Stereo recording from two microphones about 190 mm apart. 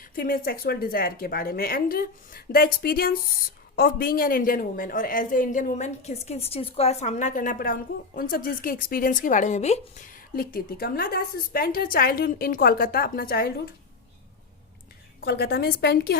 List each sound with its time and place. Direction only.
0.0 s a woman's voice: 50° left (ahead or behind)
15.2 s a woman's voice: 55° left (ahead or behind)